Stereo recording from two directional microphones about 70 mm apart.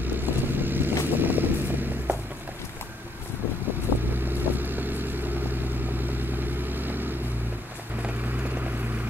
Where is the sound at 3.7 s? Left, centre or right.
Right.